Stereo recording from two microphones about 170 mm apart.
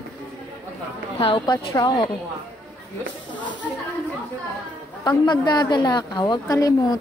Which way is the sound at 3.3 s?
25° left (ahead or behind).